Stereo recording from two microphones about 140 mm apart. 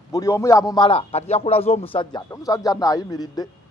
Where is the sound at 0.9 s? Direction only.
45° left (ahead or behind).